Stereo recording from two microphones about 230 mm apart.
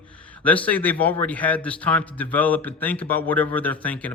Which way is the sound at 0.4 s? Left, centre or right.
Centre.